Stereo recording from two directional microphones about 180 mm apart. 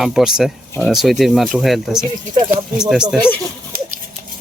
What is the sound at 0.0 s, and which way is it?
Speech, centre (ahead or behind).